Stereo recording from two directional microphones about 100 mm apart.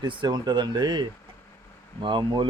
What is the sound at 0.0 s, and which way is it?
Speech, 50° right (ahead or behind).